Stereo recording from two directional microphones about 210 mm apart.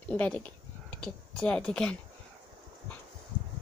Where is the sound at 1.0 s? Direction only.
5° left (ahead or behind).